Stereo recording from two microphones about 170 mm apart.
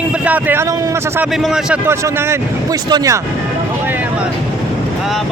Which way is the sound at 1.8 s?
15° right (ahead or behind).